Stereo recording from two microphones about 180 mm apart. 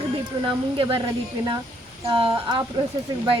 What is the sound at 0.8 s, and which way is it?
Speech, 30° right (ahead or behind).